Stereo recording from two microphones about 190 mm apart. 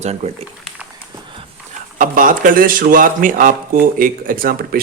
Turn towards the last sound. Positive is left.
turn(degrees=-50)  # may be behind; listen again after turning